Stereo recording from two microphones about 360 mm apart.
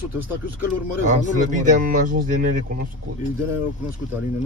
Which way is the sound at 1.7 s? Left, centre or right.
Right.